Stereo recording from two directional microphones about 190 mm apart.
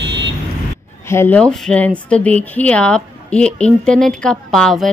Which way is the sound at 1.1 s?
10° left (ahead or behind).